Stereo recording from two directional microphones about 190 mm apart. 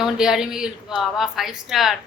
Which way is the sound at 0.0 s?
5° right (ahead or behind).